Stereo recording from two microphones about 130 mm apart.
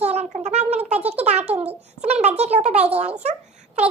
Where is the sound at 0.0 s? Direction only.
55° right (ahead or behind).